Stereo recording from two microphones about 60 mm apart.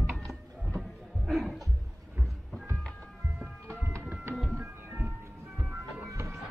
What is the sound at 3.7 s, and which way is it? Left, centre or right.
Music, right.